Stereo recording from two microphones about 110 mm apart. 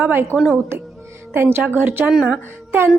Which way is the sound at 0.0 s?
20° right (ahead or behind).